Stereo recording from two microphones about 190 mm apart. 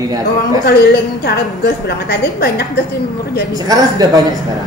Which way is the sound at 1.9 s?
55° left (ahead or behind).